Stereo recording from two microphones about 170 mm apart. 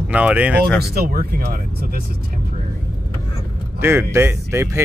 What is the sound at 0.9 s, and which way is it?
Speech, 60° right (ahead or behind).